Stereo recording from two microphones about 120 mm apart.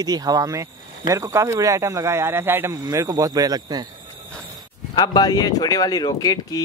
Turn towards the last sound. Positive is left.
turn(degrees=35)  # may be behind; listen again after turning